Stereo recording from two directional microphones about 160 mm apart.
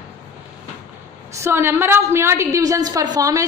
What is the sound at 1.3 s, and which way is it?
A woman's voice, 15° right (ahead or behind).